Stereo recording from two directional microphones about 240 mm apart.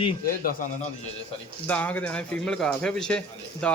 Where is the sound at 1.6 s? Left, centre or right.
Centre.